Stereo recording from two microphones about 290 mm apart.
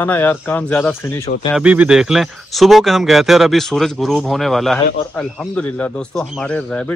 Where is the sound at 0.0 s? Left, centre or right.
Centre.